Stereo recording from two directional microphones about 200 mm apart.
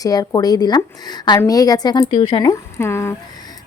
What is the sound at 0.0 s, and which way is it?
A woman's voice, 20° left (ahead or behind).